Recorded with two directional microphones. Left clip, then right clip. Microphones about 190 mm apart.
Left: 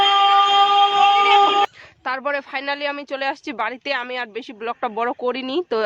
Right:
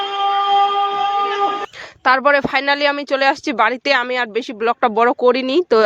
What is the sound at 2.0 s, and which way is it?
Speech, 35° right (ahead or behind).